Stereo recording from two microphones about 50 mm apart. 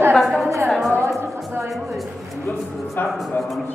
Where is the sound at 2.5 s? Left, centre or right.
Left.